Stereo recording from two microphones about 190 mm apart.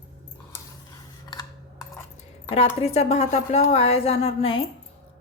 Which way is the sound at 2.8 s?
35° left (ahead or behind).